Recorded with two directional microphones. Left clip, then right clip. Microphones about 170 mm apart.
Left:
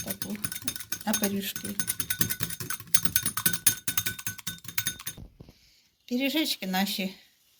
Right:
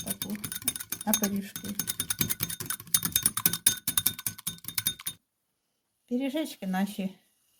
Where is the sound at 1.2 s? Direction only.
35° right (ahead or behind).